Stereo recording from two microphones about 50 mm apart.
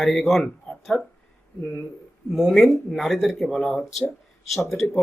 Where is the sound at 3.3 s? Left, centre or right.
Centre.